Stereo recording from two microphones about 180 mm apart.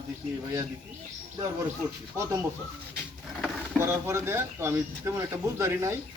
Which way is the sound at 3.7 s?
15° right (ahead or behind).